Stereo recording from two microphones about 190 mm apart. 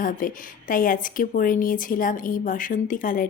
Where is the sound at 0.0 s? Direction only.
45° left (ahead or behind).